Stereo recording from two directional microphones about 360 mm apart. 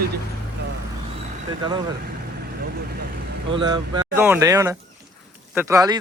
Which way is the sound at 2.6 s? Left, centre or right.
Right.